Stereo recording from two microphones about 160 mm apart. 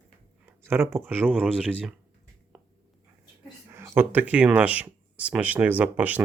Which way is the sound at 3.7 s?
15° right (ahead or behind).